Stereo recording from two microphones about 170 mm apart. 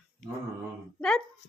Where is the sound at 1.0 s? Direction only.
5° left (ahead or behind).